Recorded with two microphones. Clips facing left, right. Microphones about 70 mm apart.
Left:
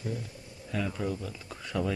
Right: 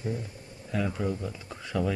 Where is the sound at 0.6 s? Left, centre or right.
Centre.